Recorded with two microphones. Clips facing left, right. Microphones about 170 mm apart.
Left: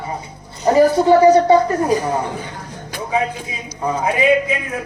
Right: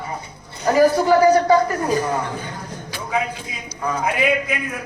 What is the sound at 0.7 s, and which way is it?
Speech, 25° left (ahead or behind).